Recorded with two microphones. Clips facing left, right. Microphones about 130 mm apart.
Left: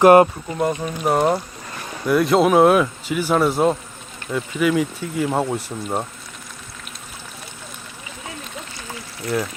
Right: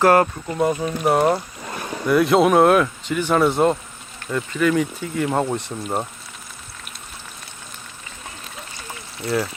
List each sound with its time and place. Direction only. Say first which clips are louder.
0.0 s speech: left 5 dB; 20° left (ahead or behind)
0.5 s speech: right 1 dB; centre (ahead or behind)